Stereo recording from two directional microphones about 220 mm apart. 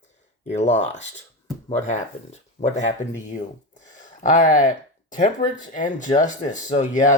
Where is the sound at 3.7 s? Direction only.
35° left (ahead or behind).